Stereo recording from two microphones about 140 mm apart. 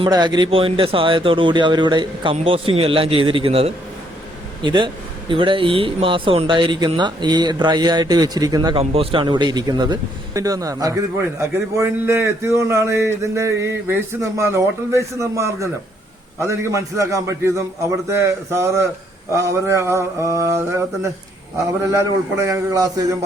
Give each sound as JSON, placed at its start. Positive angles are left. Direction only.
{"t": 0.0, "sound": "speech", "side_deg": -30}
{"t": 8.7, "sound": "speech", "side_deg": -40}
{"t": 22.4, "sound": "speech", "side_deg": -20}